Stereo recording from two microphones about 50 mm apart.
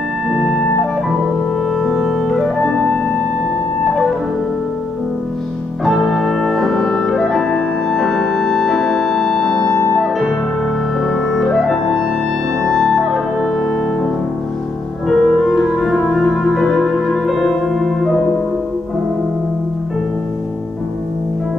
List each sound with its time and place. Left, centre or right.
1.8 s music: centre
2.8 s music: left
5.9 s music: centre
9.5 s music: centre
11.1 s music: centre
12.6 s music: centre
15.0 s music: centre